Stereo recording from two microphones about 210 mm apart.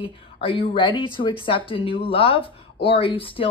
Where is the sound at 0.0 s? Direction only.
25° left (ahead or behind).